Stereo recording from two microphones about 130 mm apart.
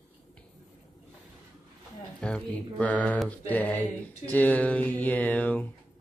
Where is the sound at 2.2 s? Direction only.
10° left (ahead or behind).